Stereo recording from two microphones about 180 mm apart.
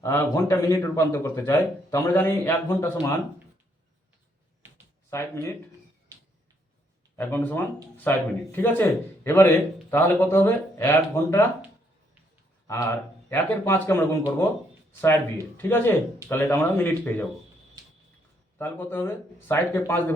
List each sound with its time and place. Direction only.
0.0 s speech: 15° left (ahead or behind)
5.1 s speech: 15° left (ahead or behind)
7.2 s speech: 10° left (ahead or behind)
12.6 s speech: 15° left (ahead or behind)
15.5 s speech: 10° left (ahead or behind)
18.6 s speech: 10° left (ahead or behind)